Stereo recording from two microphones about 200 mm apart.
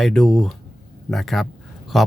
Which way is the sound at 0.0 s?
Centre (ahead or behind).